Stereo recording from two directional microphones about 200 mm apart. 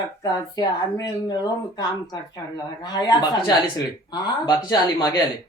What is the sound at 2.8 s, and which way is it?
Speech, 20° left (ahead or behind).